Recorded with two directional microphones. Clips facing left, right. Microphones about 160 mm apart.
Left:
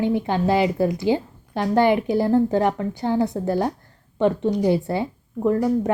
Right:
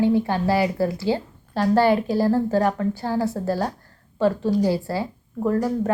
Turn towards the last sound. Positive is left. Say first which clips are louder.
# left 2 dB
turn(degrees=20)  # may be behind; listen again after turning